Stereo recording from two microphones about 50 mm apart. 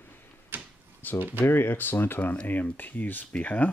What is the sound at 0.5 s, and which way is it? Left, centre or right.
Door, right.